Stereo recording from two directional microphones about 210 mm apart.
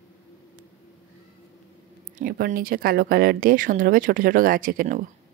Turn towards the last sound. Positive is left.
turn(degrees=-40)  # may be behind; listen again after turning